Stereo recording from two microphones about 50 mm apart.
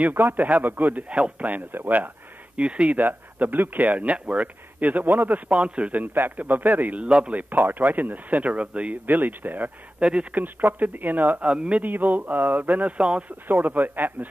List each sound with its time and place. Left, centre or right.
0.1 s speech: right
1.7 s a sound: right
2.6 s a man's voice: right
3.0 s a man's voice: right
7.4 s speech: right
9.0 s speech: right
9.9 s speech: right
10.3 s speech: right
11.4 s a man's voice: right
11.8 s speech: right
13.5 s speech: right